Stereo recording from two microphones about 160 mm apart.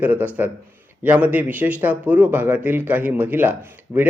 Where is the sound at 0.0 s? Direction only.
10° right (ahead or behind).